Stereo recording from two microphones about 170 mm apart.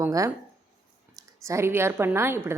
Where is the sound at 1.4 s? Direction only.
15° right (ahead or behind).